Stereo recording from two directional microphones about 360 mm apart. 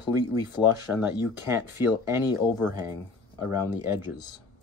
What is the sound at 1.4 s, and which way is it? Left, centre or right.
Speech, centre.